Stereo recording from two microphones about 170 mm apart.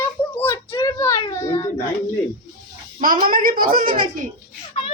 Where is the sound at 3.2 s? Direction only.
55° right (ahead or behind).